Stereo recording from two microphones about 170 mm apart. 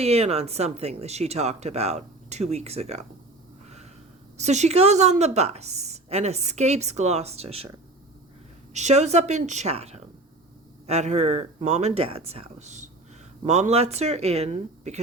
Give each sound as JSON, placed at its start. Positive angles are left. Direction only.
{"t": 0.0, "sound": "a woman's voice", "side_deg": -40}
{"t": 4.4, "sound": "a woman's voice", "side_deg": -40}
{"t": 8.7, "sound": "a woman's voice", "side_deg": -40}